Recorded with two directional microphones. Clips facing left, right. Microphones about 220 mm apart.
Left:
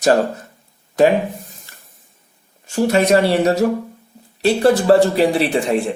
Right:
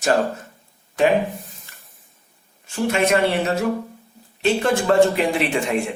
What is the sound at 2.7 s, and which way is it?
Speech, 40° left (ahead or behind).